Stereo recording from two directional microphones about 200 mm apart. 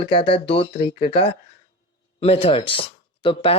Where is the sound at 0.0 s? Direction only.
25° left (ahead or behind).